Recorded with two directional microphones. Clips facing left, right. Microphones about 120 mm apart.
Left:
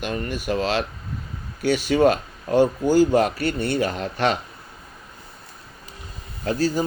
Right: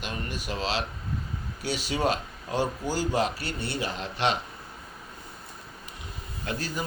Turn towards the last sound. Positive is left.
turn(degrees=35)  # may be behind; listen again after turning